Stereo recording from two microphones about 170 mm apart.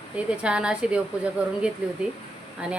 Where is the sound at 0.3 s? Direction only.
5° right (ahead or behind).